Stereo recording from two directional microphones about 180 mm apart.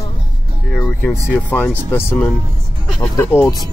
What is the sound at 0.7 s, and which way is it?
Speech, 5° left (ahead or behind).